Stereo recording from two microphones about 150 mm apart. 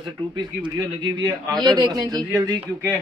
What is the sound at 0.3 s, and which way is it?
A man's voice, 30° right (ahead or behind).